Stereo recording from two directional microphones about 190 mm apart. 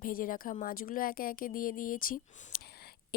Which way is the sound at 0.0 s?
50° left (ahead or behind).